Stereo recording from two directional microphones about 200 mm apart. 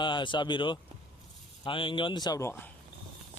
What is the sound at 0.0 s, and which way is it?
Speech, 25° left (ahead or behind).